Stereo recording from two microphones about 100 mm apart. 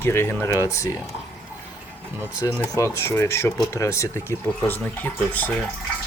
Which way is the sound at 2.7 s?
30° left (ahead or behind).